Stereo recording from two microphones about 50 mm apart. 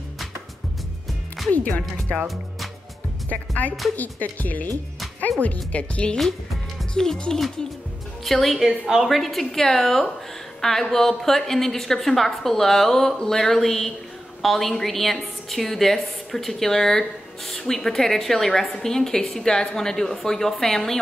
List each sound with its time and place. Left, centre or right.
2.1 s music: centre
3.3 s speech: left
6.9 s a woman's voice: centre